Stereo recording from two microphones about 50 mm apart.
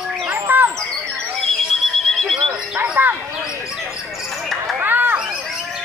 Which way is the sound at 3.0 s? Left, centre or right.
Right.